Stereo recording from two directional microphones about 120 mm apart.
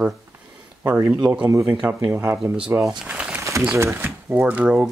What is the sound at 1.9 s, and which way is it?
Speech, 25° right (ahead or behind).